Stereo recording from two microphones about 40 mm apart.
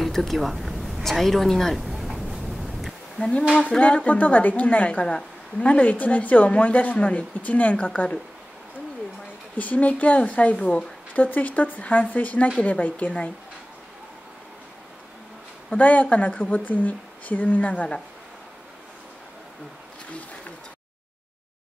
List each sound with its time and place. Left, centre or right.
0.0 s a sound: centre
1.0 s a woman's voice: centre
1.8 s a sound: centre
3.6 s a woman's voice: left
9.6 s a woman's voice: left
15.7 s a woman's voice: left